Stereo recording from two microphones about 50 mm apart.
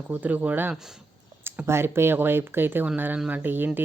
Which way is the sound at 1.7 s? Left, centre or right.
Right.